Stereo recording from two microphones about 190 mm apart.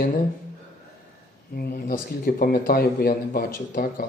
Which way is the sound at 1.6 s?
50° left (ahead or behind).